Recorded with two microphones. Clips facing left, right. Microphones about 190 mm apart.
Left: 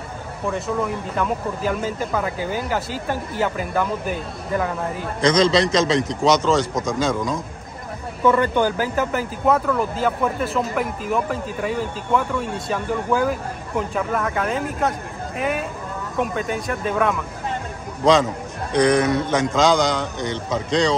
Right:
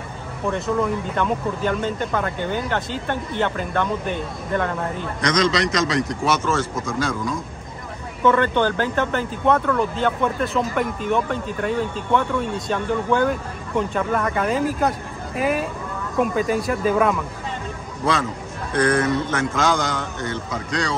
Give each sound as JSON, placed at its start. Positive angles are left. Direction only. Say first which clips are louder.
{"t": 0.5, "sound": "speech", "louder": "right 2 dB", "side_deg": 0}
{"t": 5.2, "sound": "a man's voice", "louder": "left 4 dB", "side_deg": 30}
{"t": 8.2, "sound": "speech", "louder": "even", "side_deg": 10}
{"t": 18.7, "sound": "speech", "louder": "left 2 dB", "side_deg": 15}